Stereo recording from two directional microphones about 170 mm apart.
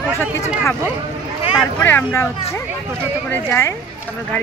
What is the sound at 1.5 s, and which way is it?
Speech, 10° left (ahead or behind).